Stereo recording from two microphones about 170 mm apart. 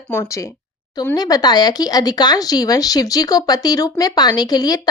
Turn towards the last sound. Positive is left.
turn(degrees=20)  # may be behind; listen again after turning